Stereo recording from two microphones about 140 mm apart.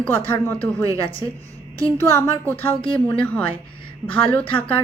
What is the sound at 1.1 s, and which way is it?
Speech, 40° left (ahead or behind).